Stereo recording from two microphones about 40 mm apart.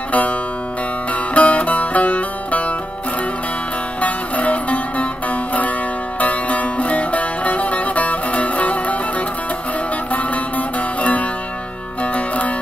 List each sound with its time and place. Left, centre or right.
0.1 s music: left
4.0 s music: left
10.1 s music: left